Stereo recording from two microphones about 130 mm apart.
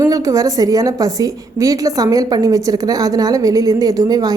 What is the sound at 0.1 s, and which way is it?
A woman's voice, 25° right (ahead or behind).